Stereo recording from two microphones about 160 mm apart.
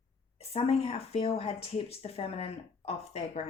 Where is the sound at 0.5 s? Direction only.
40° left (ahead or behind).